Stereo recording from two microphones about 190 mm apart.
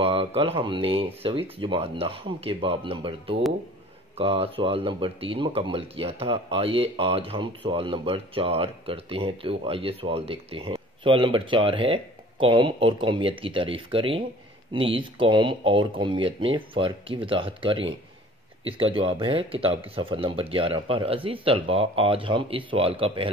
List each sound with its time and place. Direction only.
0.0 s speech: 30° right (ahead or behind)